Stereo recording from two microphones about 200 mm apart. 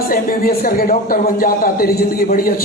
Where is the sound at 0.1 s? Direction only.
45° left (ahead or behind).